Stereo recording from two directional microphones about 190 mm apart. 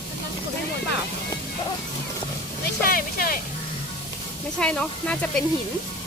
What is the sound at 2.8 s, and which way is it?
Speech, 50° left (ahead or behind).